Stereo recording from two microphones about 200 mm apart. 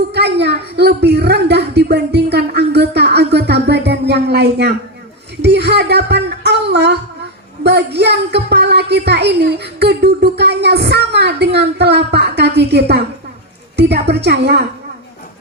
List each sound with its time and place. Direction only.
0.1 s a woman's voice: 55° right (ahead or behind)
3.3 s a sound: 55° right (ahead or behind)
5.4 s speech: 60° right (ahead or behind)